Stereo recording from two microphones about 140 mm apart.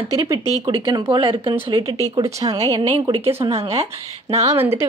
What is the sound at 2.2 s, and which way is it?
Speech, 25° right (ahead or behind).